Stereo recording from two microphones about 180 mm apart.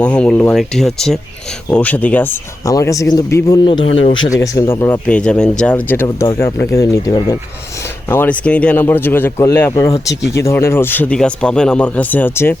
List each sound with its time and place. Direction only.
0.0 s speech: 5° left (ahead or behind)
3.9 s speech: 30° left (ahead or behind)
4.3 s speech: 15° left (ahead or behind)